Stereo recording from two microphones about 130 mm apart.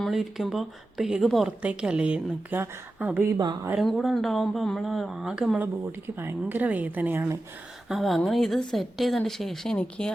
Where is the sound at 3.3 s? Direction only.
30° right (ahead or behind).